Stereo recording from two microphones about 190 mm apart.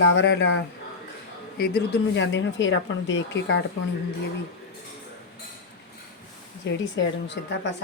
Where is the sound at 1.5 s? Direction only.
55° left (ahead or behind); by 3.6 s 75° left (ahead or behind).